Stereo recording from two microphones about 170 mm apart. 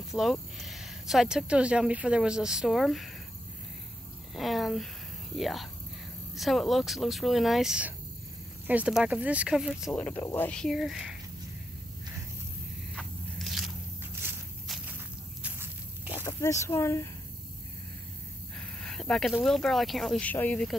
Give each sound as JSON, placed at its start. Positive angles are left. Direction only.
{"t": 0.1, "sound": "speech", "side_deg": 0}
{"t": 4.4, "sound": "speech", "side_deg": 0}
{"t": 12.9, "sound": "biting", "side_deg": 0}
{"t": 14.2, "sound": "a sound", "side_deg": -10}
{"t": 15.4, "sound": "walk", "side_deg": -10}
{"t": 16.3, "sound": "speech", "side_deg": 15}
{"t": 18.6, "sound": "speech", "side_deg": 5}